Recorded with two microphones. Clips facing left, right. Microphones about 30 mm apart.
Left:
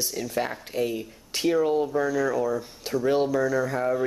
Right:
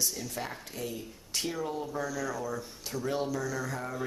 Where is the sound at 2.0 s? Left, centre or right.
Left.